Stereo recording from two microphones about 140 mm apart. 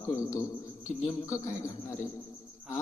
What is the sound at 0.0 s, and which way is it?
Speech, 20° left (ahead or behind).